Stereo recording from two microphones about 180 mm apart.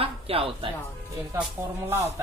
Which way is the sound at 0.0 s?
30° right (ahead or behind).